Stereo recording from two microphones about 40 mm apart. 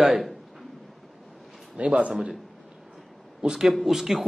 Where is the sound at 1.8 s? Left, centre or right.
Right.